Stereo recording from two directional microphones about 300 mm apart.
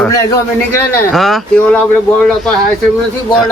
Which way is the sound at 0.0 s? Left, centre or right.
Centre.